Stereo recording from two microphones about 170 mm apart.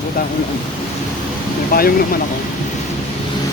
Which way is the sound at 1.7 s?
60° left (ahead or behind).